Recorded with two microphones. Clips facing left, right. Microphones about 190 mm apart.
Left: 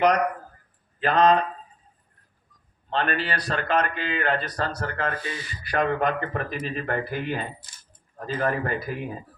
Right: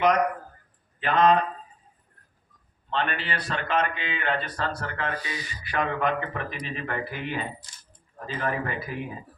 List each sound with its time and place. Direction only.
0.9 s speech: 35° left (ahead or behind)
2.9 s a man's voice: 40° left (ahead or behind)